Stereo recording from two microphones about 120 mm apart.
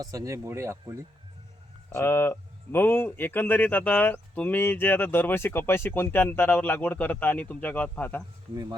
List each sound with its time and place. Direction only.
0.0 s speech: 30° right (ahead or behind)
1.9 s speech: 20° left (ahead or behind)